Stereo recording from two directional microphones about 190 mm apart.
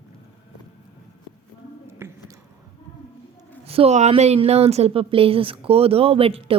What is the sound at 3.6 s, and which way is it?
A woman's voice, 30° right (ahead or behind).